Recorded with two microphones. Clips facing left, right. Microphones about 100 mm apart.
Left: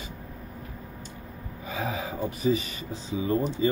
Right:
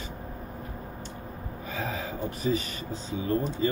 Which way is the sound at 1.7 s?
15° left (ahead or behind).